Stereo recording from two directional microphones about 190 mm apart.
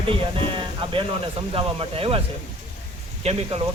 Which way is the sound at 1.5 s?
30° right (ahead or behind).